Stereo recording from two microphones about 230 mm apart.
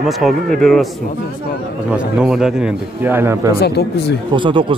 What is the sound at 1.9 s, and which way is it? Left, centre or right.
Speech, centre.